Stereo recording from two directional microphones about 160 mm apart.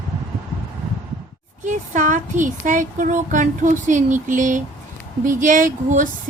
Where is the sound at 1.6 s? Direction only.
50° right (ahead or behind).